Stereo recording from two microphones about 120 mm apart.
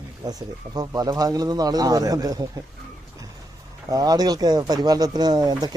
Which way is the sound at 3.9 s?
35° right (ahead or behind).